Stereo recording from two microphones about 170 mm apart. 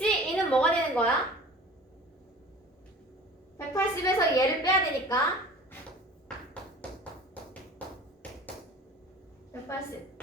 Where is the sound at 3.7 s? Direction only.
20° left (ahead or behind).